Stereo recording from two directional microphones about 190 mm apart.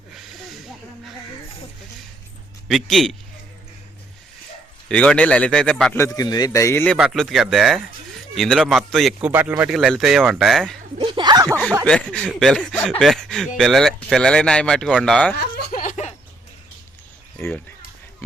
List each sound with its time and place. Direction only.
2.6 s speech: centre (ahead or behind)
4.9 s speech: 5° left (ahead or behind)
6.0 s speech: 20° left (ahead or behind)
6.9 s speech: centre (ahead or behind)
9.3 s speech: 10° right (ahead or behind)
11.0 s a sound: 25° right (ahead or behind)
11.9 s speech: 5° left (ahead or behind)
15.4 s a sound: 50° left (ahead or behind)
17.4 s speech: 10° left (ahead or behind)